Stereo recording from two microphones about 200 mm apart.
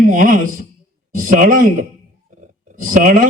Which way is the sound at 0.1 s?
40° right (ahead or behind).